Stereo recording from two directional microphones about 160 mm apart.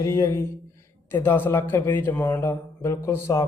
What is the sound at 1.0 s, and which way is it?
Speech, 15° left (ahead or behind).